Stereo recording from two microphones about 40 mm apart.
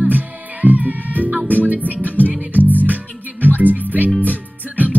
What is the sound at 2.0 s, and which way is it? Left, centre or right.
Music, left.